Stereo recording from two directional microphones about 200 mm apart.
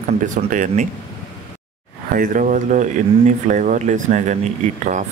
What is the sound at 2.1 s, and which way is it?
Speech, 40° right (ahead or behind).